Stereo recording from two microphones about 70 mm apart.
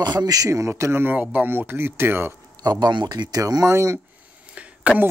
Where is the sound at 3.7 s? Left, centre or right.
Right.